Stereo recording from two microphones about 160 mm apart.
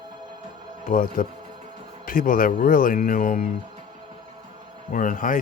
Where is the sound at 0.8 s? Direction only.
60° left (ahead or behind).